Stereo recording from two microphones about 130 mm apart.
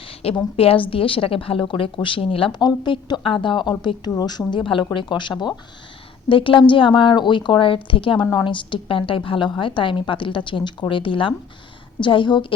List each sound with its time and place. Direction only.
0.0 s a woman's voice: 50° left (ahead or behind)